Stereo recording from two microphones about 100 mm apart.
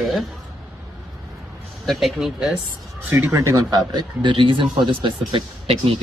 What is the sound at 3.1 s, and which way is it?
Speech, 25° right (ahead or behind).